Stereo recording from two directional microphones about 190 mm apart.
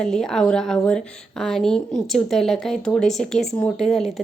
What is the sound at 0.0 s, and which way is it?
Speech, centre (ahead or behind).